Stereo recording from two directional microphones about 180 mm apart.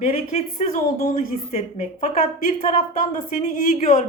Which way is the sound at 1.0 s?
50° left (ahead or behind).